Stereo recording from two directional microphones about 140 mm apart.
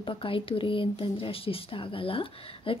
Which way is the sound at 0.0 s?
40° left (ahead or behind).